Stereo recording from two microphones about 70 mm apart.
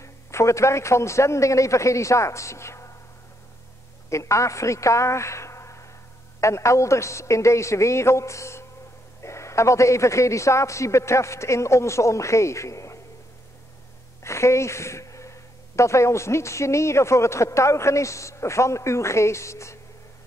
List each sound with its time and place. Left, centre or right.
0.0 s speech: left
4.1 s a woman's voice: left
14.2 s speech: left